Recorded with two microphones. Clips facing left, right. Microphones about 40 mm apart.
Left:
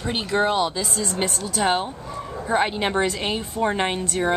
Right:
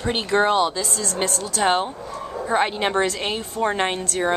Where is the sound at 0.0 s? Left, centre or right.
Centre.